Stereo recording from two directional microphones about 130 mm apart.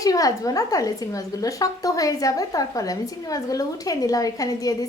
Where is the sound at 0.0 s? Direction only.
30° left (ahead or behind).